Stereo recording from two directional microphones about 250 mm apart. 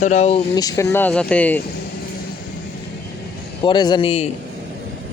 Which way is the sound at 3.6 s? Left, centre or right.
Centre.